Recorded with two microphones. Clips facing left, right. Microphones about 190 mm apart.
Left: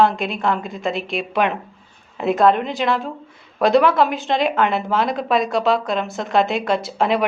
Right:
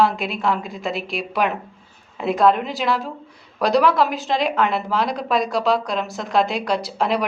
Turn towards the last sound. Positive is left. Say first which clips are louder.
# left 2 dB
turn(degrees=0)  # may be behind; listen again after turning